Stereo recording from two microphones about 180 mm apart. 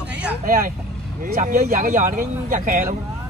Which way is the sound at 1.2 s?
45° right (ahead or behind).